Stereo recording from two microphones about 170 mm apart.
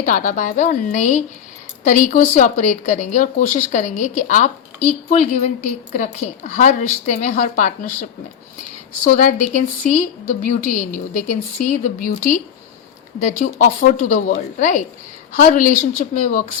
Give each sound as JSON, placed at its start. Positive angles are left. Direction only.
{"t": 0.0, "sound": "speech", "side_deg": 50}
{"t": 9.0, "sound": "speech", "side_deg": 45}
{"t": 13.4, "sound": "speech", "side_deg": 55}